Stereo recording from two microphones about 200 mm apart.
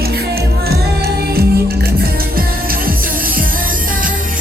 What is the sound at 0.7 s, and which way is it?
Music, 50° right (ahead or behind).